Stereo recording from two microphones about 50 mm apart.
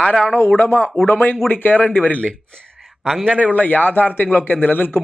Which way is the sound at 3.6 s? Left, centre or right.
Left.